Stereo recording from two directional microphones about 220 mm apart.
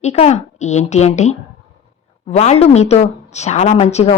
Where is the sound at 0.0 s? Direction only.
30° left (ahead or behind).